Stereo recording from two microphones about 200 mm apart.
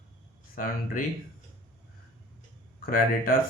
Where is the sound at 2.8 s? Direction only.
45° left (ahead or behind).